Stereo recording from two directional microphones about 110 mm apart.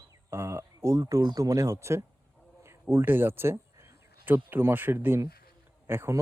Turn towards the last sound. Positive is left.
turn(degrees=-20)  # may be behind; listen again after turning